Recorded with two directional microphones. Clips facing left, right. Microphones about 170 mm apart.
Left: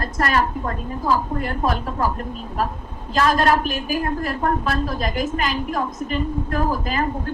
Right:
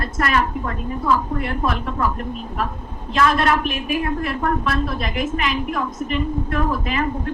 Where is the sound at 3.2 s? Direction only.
35° left (ahead or behind).